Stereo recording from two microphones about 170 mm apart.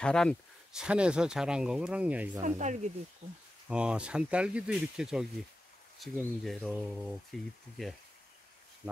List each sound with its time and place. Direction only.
0.0 s speech: 5° left (ahead or behind)
2.4 s speech: 45° right (ahead or behind)
3.6 s speech: 5° right (ahead or behind)